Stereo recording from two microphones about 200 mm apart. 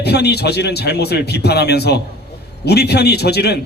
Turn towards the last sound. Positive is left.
turn(degrees=55)  # may be behind; listen again after turning